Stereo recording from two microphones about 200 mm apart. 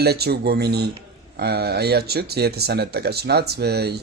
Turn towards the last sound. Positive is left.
turn(degrees=-55)  # may be behind; listen again after turning